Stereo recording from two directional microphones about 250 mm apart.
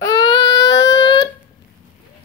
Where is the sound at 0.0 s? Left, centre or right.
Centre.